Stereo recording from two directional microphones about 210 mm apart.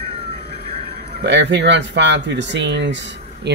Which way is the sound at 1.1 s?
55° right (ahead or behind).